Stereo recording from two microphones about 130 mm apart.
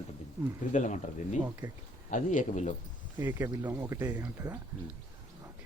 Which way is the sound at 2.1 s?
80° left.